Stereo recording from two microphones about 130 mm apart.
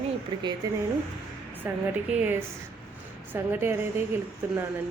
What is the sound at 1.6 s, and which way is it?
Speech, 15° right (ahead or behind).